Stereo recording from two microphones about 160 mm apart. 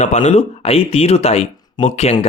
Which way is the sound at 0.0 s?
45° left (ahead or behind).